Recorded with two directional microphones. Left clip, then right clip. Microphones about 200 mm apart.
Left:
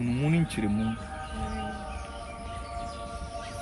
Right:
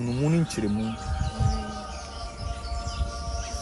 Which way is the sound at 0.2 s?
25° right (ahead or behind).